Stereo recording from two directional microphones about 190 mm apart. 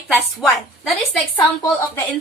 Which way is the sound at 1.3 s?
15° left (ahead or behind).